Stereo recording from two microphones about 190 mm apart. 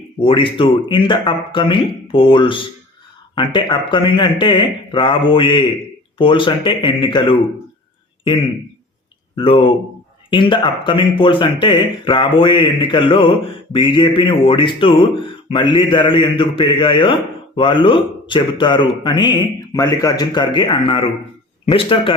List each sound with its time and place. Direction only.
0.2 s speech: 25° left (ahead or behind)
9.3 s speech: 30° left (ahead or behind)